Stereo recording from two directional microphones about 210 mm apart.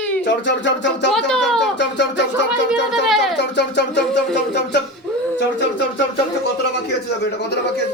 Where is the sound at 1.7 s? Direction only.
55° left (ahead or behind).